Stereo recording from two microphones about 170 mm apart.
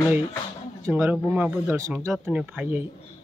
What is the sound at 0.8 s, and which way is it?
Speech, 15° right (ahead or behind).